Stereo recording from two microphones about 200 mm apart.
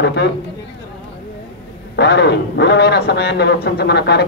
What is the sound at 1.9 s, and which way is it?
Speech, 60° left (ahead or behind).